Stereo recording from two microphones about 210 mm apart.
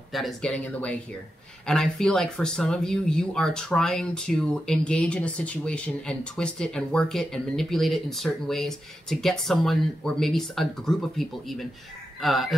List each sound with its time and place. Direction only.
0.1 s speech: centre (ahead or behind)